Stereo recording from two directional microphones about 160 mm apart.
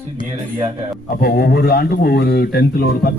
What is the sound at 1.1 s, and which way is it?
Speech, 75° left (ahead or behind).